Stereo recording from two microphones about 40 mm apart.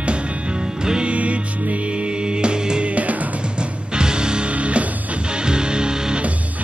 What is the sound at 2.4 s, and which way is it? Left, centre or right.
Music, right.